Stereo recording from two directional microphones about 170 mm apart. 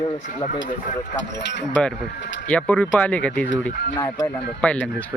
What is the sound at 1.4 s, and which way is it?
Speech, 90° left.